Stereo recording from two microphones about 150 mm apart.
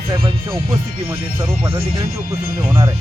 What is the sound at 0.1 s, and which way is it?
Speech, 35° right (ahead or behind).